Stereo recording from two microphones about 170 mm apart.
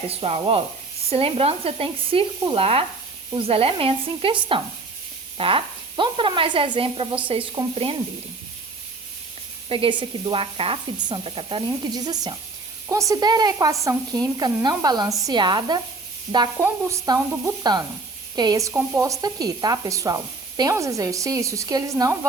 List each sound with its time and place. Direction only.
0.1 s speech: 35° right (ahead or behind)
9.6 s speech: 30° right (ahead or behind)